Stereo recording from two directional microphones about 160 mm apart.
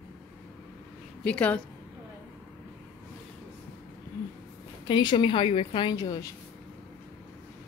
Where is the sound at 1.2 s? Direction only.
10° left (ahead or behind).